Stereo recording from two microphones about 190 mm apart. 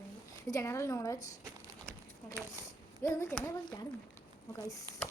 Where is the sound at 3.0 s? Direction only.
15° left (ahead or behind).